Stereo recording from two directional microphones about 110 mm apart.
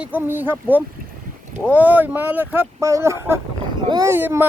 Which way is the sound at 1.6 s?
15° right (ahead or behind).